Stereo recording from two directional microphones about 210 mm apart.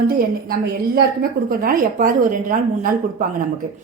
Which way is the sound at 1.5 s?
40° right (ahead or behind).